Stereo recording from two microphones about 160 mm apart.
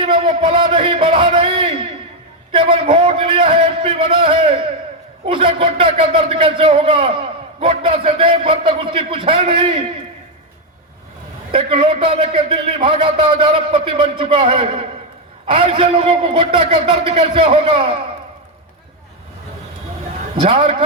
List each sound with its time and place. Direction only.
0.0 s a man's voice: 30° right (ahead or behind)
11.5 s a man's voice: 40° right (ahead or behind)
20.4 s a man's voice: 40° right (ahead or behind)